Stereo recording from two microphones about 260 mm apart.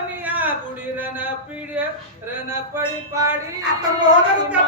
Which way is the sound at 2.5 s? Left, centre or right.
Centre.